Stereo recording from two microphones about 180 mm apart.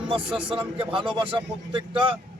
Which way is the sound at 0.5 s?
30° right (ahead or behind).